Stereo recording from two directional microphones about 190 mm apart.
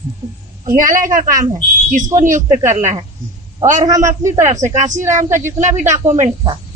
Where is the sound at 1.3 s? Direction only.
15° right (ahead or behind).